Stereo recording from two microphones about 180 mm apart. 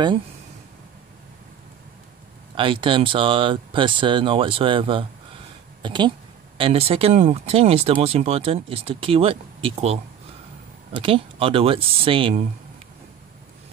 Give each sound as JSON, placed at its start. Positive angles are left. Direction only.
{"t": 2.5, "sound": "speech", "side_deg": -30}
{"t": 11.0, "sound": "speech", "side_deg": -30}